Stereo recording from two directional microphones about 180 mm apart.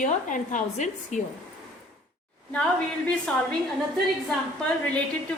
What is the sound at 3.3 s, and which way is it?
Speech, 5° left (ahead or behind).